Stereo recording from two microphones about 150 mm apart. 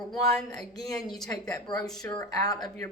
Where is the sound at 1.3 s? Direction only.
25° left (ahead or behind).